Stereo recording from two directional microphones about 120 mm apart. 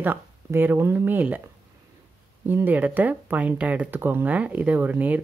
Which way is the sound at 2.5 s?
15° right (ahead or behind).